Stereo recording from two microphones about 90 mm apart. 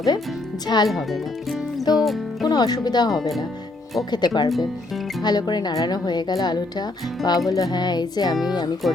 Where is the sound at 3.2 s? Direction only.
Centre (ahead or behind).